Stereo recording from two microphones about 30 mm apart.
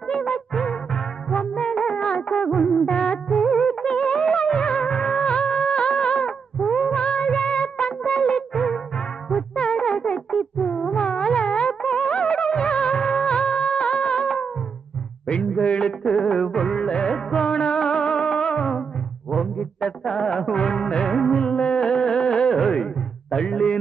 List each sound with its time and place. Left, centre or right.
0.1 s music: left
3.5 s music of bollywood: left
9.6 s music: left
15.6 s a sound: left
16.1 s music: left
16.5 s music of bollywood: left
20.2 s music: left
23.3 s a sound: left